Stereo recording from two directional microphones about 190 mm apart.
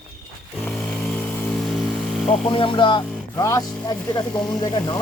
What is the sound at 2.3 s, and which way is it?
Speech, 25° left (ahead or behind).